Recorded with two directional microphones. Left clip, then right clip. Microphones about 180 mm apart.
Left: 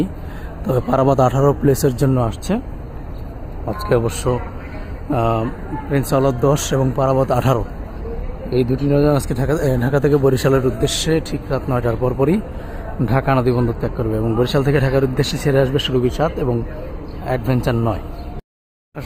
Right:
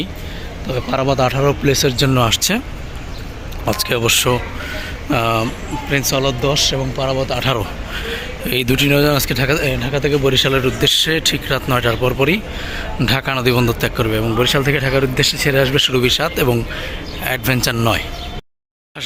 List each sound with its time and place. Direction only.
0.7 s speech: 25° left (ahead or behind)
1.4 s a man's voice: 15° left (ahead or behind)
2.0 s a man's voice: centre (ahead or behind)
3.7 s a man's voice: centre (ahead or behind)
6.1 s speech: 35° left (ahead or behind)
8.4 s a man's voice: 5° right (ahead or behind); by 9.6 s 15° left (ahead or behind)
9.6 s speech: 30° left (ahead or behind)
10.2 s a man's voice: 15° left (ahead or behind)
14.3 s a man's voice: 15° left (ahead or behind)